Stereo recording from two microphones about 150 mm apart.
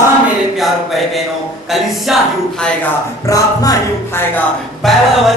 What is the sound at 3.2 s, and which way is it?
Music, 20° left (ahead or behind).